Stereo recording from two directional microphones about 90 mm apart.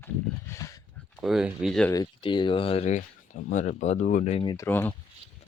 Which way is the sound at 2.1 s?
65° left (ahead or behind).